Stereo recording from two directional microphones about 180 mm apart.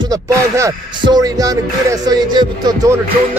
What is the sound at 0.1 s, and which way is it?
Speech, 15° right (ahead or behind).